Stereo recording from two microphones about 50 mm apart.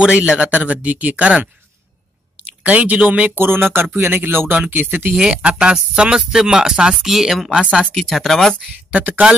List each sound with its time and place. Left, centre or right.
0.0 s speech: centre
0.5 s speech: right
3.3 s speech: right
5.1 s speech: centre
7.9 s speech: centre
8.9 s speech: right